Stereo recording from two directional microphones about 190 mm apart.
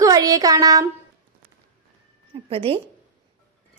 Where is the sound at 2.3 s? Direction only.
30° right (ahead or behind).